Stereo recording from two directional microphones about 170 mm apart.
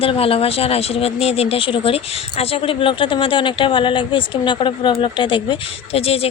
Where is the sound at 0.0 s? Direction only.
35° left (ahead or behind).